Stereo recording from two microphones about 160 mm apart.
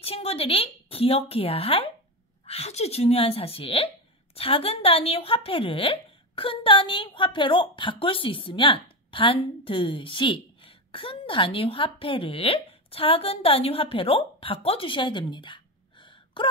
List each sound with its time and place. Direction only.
0.0 s speech: 40° left (ahead or behind)